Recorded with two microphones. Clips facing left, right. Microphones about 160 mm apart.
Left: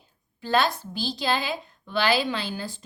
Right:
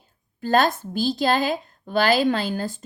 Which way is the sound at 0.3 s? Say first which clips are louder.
Right 4 dB; 45° right (ahead or behind).